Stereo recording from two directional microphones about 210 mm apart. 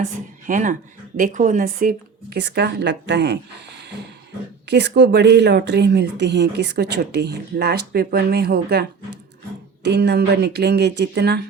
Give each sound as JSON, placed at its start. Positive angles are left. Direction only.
{"t": 0.0, "sound": "speech", "side_deg": -40}
{"t": 4.7, "sound": "speech", "side_deg": -55}